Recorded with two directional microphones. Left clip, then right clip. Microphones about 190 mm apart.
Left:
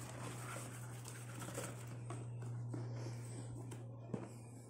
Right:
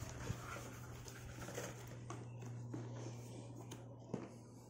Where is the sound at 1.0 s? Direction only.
40° left (ahead or behind).